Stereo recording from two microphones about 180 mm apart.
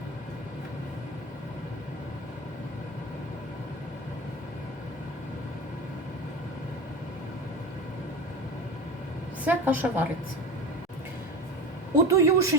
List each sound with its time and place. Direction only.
9.4 s a woman's voice: 10° right (ahead or behind)
12.0 s a woman's voice: 15° right (ahead or behind)